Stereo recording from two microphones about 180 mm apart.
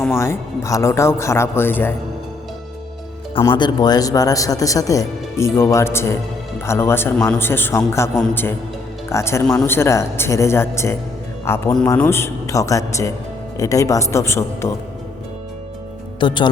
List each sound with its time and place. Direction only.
0.0 s speech: 15° left (ahead or behind)
3.4 s speech: 25° left (ahead or behind)
16.2 s speech: 25° left (ahead or behind)